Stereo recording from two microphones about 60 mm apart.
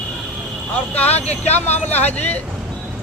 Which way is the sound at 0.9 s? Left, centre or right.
Left.